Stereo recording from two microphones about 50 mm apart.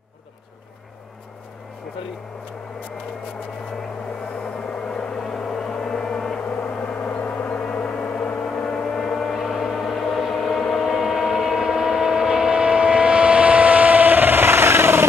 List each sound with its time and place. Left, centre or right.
4.6 s a sound: centre
6.6 s gong: left
8.5 s vehicle: centre
9.4 s vehicle: centre; by 15.0 s right